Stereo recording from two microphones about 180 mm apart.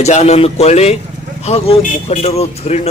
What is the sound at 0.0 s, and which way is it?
A man's voice, 40° left (ahead or behind).